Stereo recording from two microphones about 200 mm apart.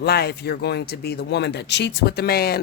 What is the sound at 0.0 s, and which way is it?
A man's voice, 55° left (ahead or behind).